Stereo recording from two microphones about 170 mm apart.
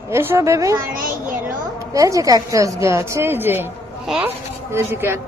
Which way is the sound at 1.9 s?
20° right (ahead or behind).